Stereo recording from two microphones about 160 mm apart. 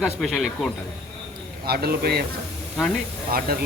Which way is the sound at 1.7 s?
80° right.